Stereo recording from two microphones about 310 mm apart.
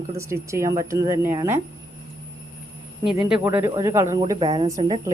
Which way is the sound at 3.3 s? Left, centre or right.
Centre.